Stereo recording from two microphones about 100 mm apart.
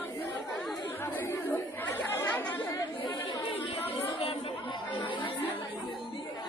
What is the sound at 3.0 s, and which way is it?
Chatter, 55° left (ahead or behind).